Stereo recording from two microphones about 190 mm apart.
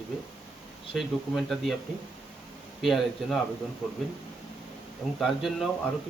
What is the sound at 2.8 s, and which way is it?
Speech, centre (ahead or behind).